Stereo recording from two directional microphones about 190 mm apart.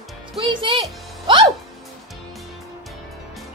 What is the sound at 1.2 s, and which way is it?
Music, 25° right (ahead or behind).